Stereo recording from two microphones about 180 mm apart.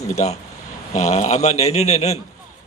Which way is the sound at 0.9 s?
40° left (ahead or behind).